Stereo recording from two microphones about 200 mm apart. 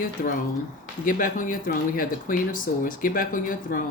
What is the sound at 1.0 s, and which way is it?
Speech, 45° left (ahead or behind).